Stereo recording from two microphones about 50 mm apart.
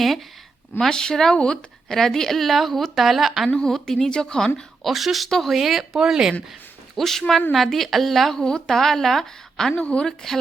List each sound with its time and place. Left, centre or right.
0.8 s a woman's voice: centre
3.5 s a woman's voice: centre
4.8 s a woman's voice: centre
6.9 s a woman's voice: centre
8.4 s a woman's voice: centre
9.7 s a woman's voice: left